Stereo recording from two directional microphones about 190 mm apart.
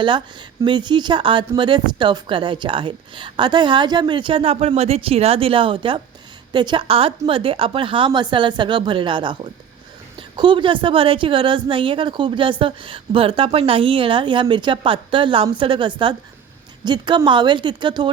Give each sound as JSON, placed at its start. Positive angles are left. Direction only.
{"t": 0.6, "sound": "a woman's voice", "side_deg": -25}